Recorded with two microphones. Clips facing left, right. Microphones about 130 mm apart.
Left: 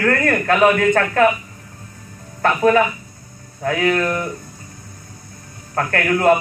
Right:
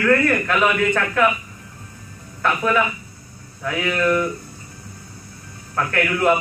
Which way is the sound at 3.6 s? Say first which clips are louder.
Left 2 dB; 40° left (ahead or behind).